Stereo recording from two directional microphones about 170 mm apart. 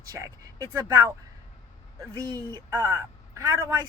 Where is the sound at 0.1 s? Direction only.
20° right (ahead or behind).